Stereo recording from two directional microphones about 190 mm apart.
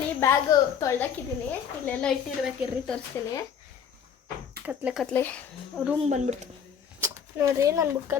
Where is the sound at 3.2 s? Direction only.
15° left (ahead or behind).